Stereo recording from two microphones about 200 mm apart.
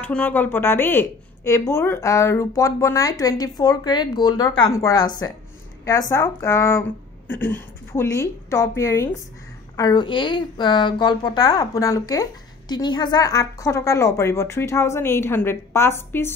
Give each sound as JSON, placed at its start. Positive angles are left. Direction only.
{"t": 0.0, "sound": "a woman's voice", "side_deg": 5}